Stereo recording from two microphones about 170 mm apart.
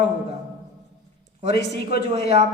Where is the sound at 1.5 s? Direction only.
75° left (ahead or behind).